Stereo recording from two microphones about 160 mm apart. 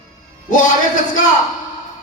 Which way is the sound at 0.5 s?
55° left (ahead or behind).